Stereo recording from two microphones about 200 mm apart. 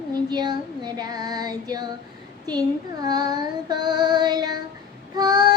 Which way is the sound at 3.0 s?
20° right (ahead or behind).